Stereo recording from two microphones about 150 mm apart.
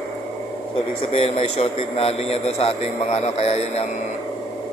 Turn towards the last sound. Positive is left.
turn(degrees=45)  # may be behind; listen again after turning